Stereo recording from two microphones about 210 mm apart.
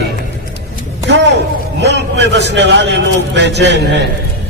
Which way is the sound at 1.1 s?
55° right (ahead or behind).